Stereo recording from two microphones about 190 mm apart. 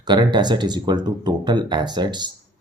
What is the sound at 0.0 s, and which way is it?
Speech, 25° right (ahead or behind).